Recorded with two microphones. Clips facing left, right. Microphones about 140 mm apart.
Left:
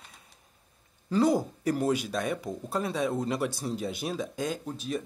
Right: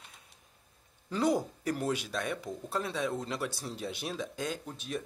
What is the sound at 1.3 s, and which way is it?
Speech, 5° left (ahead or behind).